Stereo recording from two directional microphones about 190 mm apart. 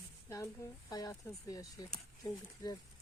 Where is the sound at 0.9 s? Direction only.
20° left (ahead or behind).